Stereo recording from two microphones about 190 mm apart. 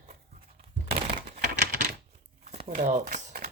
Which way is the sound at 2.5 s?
35° right (ahead or behind).